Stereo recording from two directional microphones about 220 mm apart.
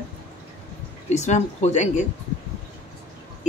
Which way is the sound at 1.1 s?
30° left (ahead or behind).